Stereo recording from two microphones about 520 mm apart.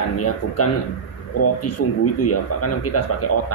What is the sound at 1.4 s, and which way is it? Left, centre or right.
Speech, left.